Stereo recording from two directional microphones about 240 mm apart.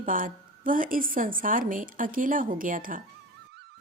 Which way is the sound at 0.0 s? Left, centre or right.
Right.